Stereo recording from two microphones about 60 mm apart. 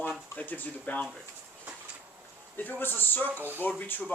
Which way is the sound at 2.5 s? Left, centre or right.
Left.